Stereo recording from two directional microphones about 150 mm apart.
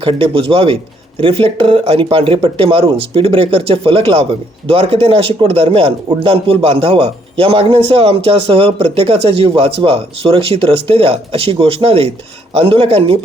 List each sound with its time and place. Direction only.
0.0 s speech: 35° right (ahead or behind)